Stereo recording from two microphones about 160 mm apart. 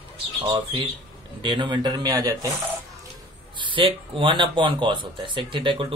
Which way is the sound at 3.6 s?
30° right (ahead or behind).